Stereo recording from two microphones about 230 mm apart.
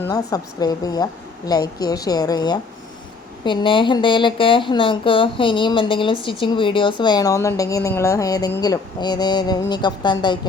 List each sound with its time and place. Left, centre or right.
0.0 s a woman's voice: centre